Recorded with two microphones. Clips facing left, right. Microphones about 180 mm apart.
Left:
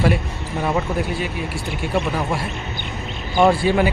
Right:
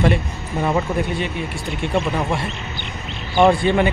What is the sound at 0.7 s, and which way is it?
Speech, centre (ahead or behind).